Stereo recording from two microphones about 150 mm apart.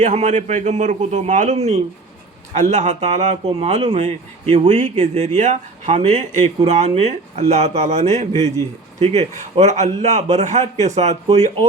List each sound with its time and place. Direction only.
0.0 s speech: 50° right (ahead or behind)